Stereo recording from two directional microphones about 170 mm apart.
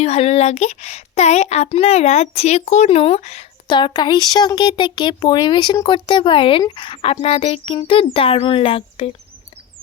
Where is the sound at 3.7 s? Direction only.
25° left (ahead or behind).